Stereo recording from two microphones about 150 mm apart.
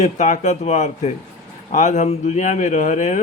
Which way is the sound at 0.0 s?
50° left (ahead or behind).